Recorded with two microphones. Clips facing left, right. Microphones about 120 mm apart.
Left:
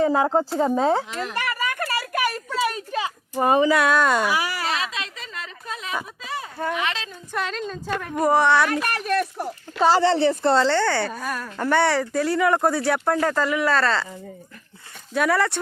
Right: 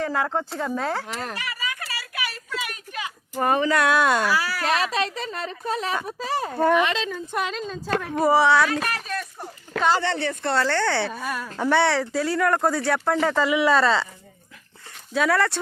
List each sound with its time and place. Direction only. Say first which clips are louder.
0.0 s speech: left 6 dB; 30° left (ahead or behind)
1.3 s a sound: left 5 dB; 55° left (ahead or behind); by 3.1 s 30° left (ahead or behind)
3.4 s speech: left 3 dB; 15° left (ahead or behind)
3.7 s speech: left 1 dB; centre (ahead or behind)
4.3 s speech: even; 15° left (ahead or behind)
4.8 s a woman's voice: right 6 dB; 40° right (ahead or behind)
6.6 s speech: right 7 dB; 50° right (ahead or behind)
7.3 s a woman's voice: left 4 dB; 10° right (ahead or behind)
7.6 s speech: right 1 dB; centre (ahead or behind)
8.8 s speech: left 6 dB; 60° left (ahead or behind)
9.8 s a woman's voice: left 5 dB; 35° left (ahead or behind)
10.7 s speech: left 3 dB; 10° left (ahead or behind)
10.9 s speech: left 1 dB; centre (ahead or behind)
15.1 s speech: even; centre (ahead or behind)